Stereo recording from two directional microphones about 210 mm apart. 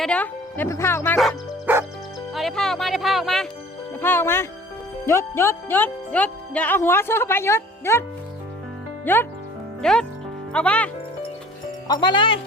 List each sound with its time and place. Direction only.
0.0 s speech: 5° left (ahead or behind)
1.2 s music: centre (ahead or behind)
2.3 s speech: centre (ahead or behind)
4.0 s speech: 10° left (ahead or behind)
9.1 s speech: 10° left (ahead or behind)
11.9 s speech: 20° left (ahead or behind)